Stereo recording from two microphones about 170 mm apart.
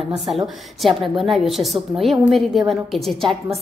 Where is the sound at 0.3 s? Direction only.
35° right (ahead or behind).